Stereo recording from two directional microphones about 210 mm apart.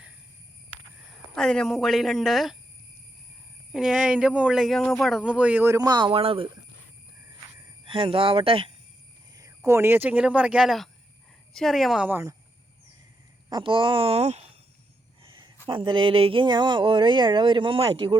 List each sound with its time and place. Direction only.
0.9 s speech: 5° left (ahead or behind)
3.7 s speech: 5° right (ahead or behind); by 6.5 s 25° right (ahead or behind)
7.9 s speech: 25° right (ahead or behind)
9.3 s cricket: 15° right (ahead or behind)
9.6 s speech: 10° right (ahead or behind)
13.5 s speech: 25° right (ahead or behind)
15.2 s a sound: 25° right (ahead or behind)
15.6 s speech: 25° right (ahead or behind)